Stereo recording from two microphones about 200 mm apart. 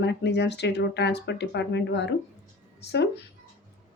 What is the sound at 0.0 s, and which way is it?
Speech, 60° left (ahead or behind).